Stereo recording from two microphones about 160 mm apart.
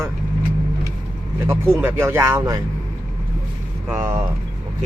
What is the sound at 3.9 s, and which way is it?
Speech, 20° right (ahead or behind).